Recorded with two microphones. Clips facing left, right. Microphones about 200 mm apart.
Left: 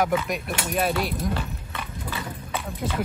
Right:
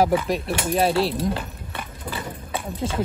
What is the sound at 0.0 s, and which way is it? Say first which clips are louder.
Speech: right 4 dB; 30° right (ahead or behind).